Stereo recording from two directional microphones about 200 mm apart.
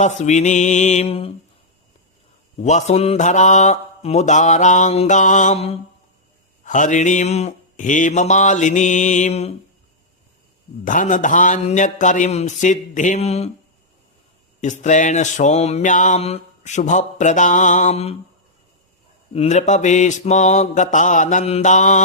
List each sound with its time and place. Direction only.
0.0 s mantra: 35° left (ahead or behind)
2.6 s mantra: 35° left (ahead or behind)
10.8 s mantra: 40° left (ahead or behind)
14.6 s mantra: 35° left (ahead or behind)
19.3 s mantra: 35° left (ahead or behind)